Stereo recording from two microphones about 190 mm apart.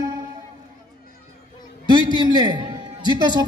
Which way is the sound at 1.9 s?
20° right (ahead or behind).